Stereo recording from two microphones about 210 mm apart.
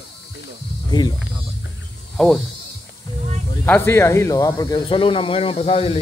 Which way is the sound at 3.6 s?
10° left (ahead or behind).